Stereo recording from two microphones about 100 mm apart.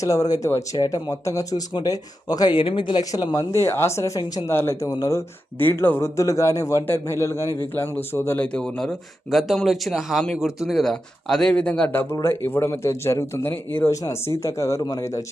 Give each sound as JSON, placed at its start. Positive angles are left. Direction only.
{"t": 0.0, "sound": "speech", "side_deg": 35}
{"t": 3.0, "sound": "speech", "side_deg": 40}
{"t": 5.5, "sound": "speech", "side_deg": 20}
{"t": 8.5, "sound": "speech", "side_deg": 10}
{"t": 13.9, "sound": "speech", "side_deg": 30}